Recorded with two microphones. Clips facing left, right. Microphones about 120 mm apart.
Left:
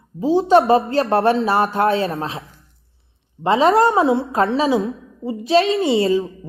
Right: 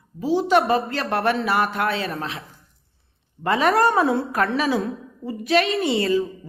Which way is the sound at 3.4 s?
25° left (ahead or behind).